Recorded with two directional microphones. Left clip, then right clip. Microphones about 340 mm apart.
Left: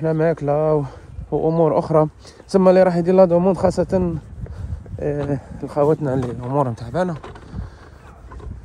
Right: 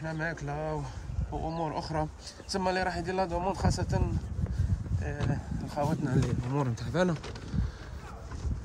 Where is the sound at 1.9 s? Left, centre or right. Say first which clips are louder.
Left 17 dB; right.